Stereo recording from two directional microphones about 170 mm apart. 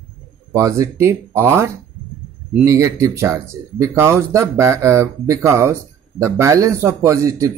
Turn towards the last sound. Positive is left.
turn(degrees=-20)  # may be behind; listen again after turning